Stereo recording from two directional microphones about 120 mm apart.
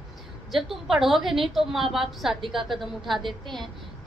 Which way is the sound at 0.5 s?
Centre (ahead or behind).